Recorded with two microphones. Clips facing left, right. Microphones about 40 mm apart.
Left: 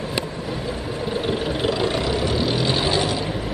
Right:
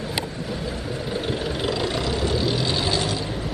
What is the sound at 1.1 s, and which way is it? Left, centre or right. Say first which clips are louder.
Vehicle: left 3 dB; centre.